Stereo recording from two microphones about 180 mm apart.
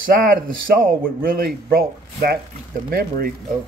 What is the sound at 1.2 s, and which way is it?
Speech, 55° right (ahead or behind).